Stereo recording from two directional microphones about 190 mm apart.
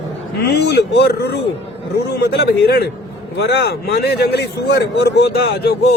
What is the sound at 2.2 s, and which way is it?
A man's voice, 60° left (ahead or behind).